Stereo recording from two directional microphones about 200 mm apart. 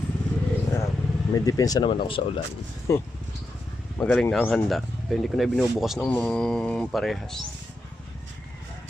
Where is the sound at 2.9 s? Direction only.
15° left (ahead or behind).